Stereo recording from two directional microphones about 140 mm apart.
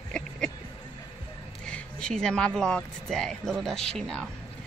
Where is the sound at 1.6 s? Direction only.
5° left (ahead or behind).